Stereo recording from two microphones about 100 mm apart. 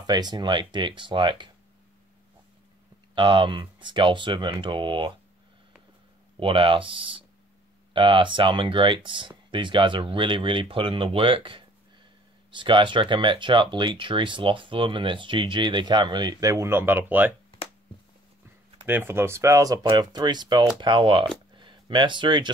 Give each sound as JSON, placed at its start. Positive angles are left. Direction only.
{"t": 0.0, "sound": "speech", "side_deg": -45}
{"t": 3.2, "sound": "speech", "side_deg": -55}
{"t": 6.4, "sound": "speech", "side_deg": -60}
{"t": 18.9, "sound": "speech", "side_deg": -20}